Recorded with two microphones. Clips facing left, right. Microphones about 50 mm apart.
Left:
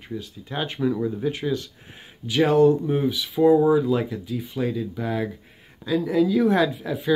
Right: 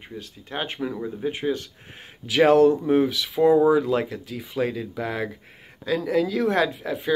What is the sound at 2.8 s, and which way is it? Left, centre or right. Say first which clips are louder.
Speech: right 3 dB; right.